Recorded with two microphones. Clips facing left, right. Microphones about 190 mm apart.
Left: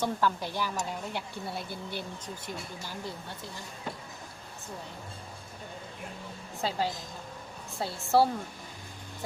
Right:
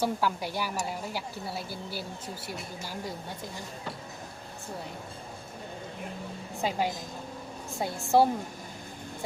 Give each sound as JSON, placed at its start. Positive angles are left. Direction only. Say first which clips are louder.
{"t": 0.0, "sound": "speech", "louder": "right 1 dB", "side_deg": -10}
{"t": 6.6, "sound": "speech", "louder": "right 2 dB", "side_deg": -15}